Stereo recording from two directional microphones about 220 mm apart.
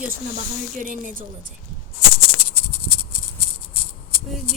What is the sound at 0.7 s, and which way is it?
Speech, 35° right (ahead or behind).